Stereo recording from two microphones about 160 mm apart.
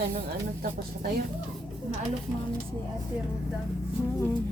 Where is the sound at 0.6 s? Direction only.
75° right (ahead or behind).